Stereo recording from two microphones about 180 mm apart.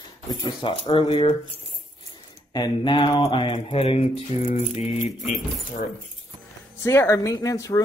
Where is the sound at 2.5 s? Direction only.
25° left (ahead or behind).